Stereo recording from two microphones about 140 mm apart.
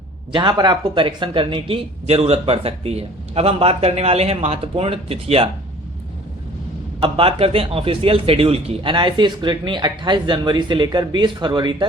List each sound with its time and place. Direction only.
0.3 s speech: 30° right (ahead or behind)
7.0 s a man's voice: 40° right (ahead or behind)